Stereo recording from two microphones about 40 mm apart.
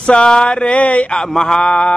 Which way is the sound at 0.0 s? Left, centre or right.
Left.